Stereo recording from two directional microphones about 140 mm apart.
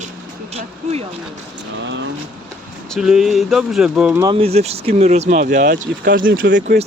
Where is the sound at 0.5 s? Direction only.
50° right (ahead or behind).